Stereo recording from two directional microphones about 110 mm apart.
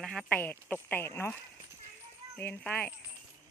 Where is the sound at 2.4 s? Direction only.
15° left (ahead or behind).